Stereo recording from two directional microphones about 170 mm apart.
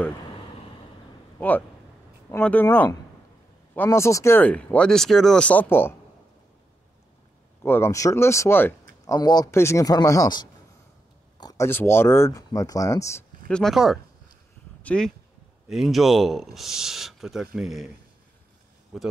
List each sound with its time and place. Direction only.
2.3 s speech: 10° left (ahead or behind)
7.6 s a man's voice: 15° left (ahead or behind)
13.5 s speech: centre (ahead or behind)